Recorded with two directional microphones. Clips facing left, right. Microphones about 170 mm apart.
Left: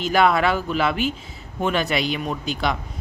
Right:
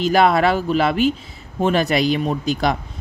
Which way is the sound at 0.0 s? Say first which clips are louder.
Right 3 dB; 35° right (ahead or behind).